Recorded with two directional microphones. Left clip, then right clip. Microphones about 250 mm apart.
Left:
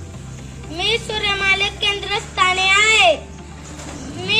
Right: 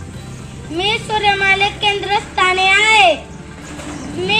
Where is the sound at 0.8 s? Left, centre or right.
Left.